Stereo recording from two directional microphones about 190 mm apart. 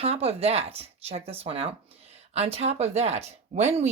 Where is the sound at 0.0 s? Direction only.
30° right (ahead or behind).